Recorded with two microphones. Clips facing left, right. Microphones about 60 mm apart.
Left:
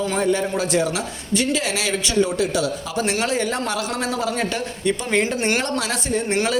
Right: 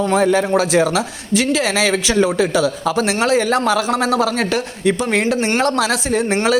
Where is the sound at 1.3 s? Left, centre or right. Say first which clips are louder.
Right 4 dB; right.